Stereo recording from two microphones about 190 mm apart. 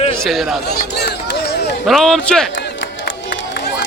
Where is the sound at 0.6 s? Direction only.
55° left (ahead or behind).